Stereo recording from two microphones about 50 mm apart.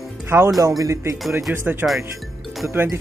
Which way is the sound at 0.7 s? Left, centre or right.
Right.